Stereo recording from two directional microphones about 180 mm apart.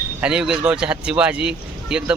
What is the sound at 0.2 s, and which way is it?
A man's voice, 5° right (ahead or behind).